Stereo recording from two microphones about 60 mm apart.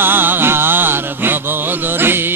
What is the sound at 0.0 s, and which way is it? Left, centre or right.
Music, right.